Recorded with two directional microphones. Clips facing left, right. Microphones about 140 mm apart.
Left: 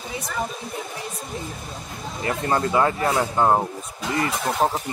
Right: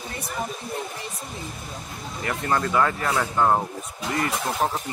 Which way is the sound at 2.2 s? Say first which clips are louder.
Left 2 dB; 25° left (ahead or behind).